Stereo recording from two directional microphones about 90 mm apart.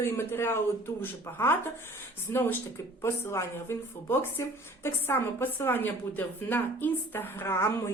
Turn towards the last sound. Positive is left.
turn(degrees=30)  # may be behind; listen again after turning